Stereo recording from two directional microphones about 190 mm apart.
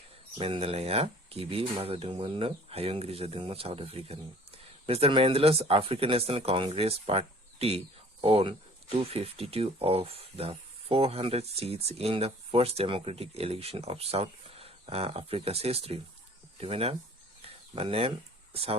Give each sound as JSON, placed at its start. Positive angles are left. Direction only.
{"t": 0.3, "sound": "speech", "side_deg": -30}
{"t": 17.4, "sound": "a sound", "side_deg": -30}
{"t": 18.5, "sound": "speech", "side_deg": -30}